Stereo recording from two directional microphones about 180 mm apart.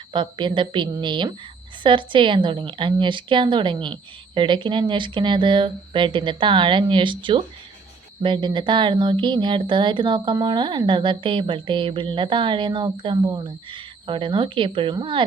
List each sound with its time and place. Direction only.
0.1 s speech: 25° right (ahead or behind)